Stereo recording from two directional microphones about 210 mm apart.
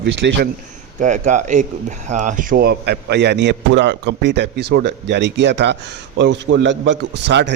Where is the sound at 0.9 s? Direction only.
35° right (ahead or behind).